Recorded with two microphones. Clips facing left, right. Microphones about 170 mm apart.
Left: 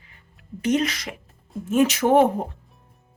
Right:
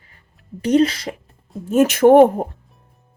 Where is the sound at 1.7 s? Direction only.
50° right (ahead or behind).